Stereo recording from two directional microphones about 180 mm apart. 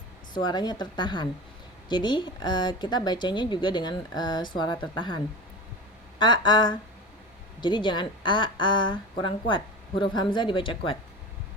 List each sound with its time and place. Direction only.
0.4 s a woman's voice: 25° left (ahead or behind)